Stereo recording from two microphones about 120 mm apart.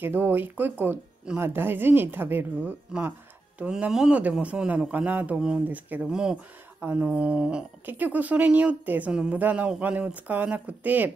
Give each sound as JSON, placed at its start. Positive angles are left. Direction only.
{"t": 0.0, "sound": "speech", "side_deg": -15}